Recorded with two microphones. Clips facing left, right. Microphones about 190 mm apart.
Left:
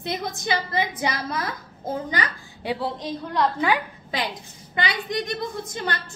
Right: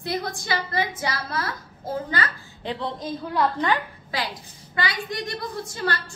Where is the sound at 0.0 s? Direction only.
20° left (ahead or behind).